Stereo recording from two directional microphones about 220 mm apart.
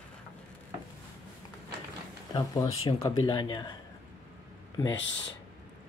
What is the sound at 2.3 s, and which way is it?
Speech, 15° left (ahead or behind).